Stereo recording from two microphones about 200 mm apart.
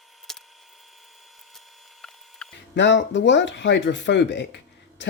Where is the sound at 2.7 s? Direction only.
65° left (ahead or behind).